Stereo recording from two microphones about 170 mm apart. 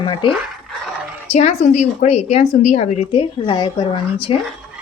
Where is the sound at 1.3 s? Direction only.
40° left (ahead or behind).